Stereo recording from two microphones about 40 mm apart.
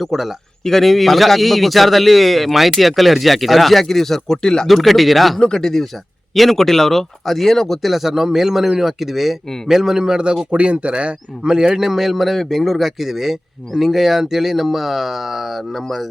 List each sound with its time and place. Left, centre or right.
0.0 s speech: centre
0.6 s a man's voice: centre
4.7 s a man's voice: centre
5.4 s a man's voice: centre; by 10.3 s right
10.5 s speech: right
11.4 s a man's voice: centre